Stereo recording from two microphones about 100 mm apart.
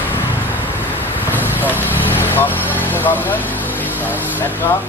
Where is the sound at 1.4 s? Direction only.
20° left (ahead or behind).